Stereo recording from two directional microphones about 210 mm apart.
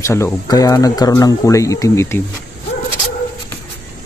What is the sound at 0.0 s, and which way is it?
Speech, 15° left (ahead or behind).